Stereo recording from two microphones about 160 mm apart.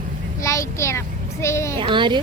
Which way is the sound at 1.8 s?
30° right (ahead or behind).